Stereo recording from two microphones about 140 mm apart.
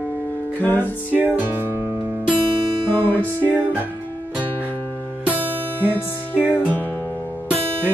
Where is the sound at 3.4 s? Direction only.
10° right (ahead or behind).